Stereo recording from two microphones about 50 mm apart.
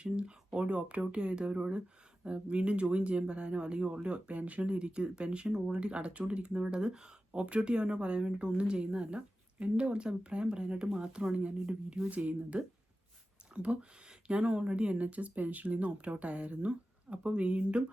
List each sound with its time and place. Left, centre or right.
0.0 s speech: centre
12.0 s speech: right